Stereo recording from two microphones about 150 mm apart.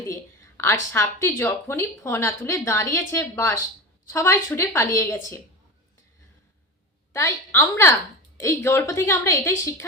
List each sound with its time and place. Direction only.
0.0 s a woman's voice: 20° left (ahead or behind)
7.1 s a woman's voice: 20° left (ahead or behind)